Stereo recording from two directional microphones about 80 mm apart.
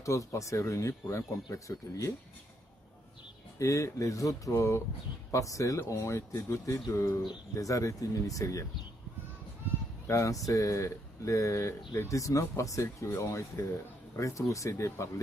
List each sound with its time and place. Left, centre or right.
0.0 s speech: left
3.5 s speech: left
10.0 s speech: left